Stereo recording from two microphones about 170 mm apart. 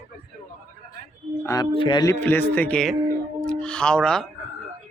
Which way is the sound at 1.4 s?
20° left (ahead or behind).